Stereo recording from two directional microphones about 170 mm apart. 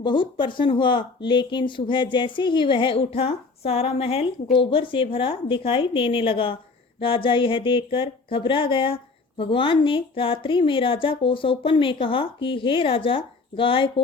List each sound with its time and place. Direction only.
0.0 s speech: 30° left (ahead or behind)